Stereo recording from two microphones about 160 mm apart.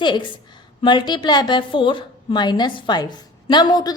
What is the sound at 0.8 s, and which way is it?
A woman's voice, 30° left (ahead or behind).